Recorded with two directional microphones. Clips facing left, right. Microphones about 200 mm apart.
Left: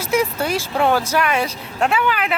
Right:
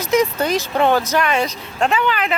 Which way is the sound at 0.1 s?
10° left (ahead or behind).